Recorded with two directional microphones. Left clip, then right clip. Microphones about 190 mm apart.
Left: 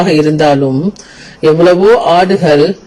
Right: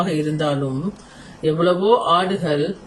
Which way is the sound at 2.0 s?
40° left (ahead or behind).